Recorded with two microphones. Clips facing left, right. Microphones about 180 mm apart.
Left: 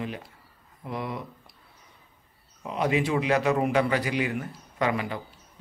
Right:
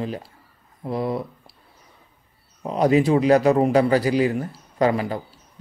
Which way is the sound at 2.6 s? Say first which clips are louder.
Right 8 dB; 35° right (ahead or behind).